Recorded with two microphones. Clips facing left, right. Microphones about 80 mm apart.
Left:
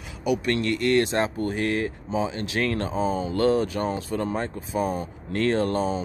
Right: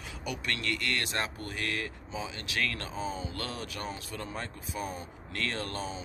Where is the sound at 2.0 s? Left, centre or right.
Left.